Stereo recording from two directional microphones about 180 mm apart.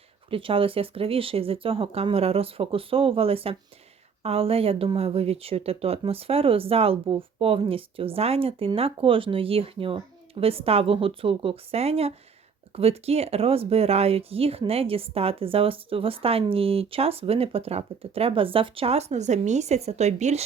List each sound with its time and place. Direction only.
0.3 s speech: 30° right (ahead or behind)